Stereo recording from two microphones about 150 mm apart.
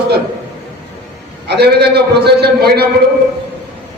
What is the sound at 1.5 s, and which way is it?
A man's voice, 90° right.